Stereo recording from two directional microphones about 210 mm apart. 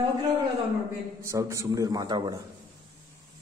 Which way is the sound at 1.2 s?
15° right (ahead or behind).